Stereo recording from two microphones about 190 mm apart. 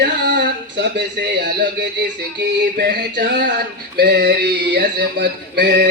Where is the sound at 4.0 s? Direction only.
50° right (ahead or behind).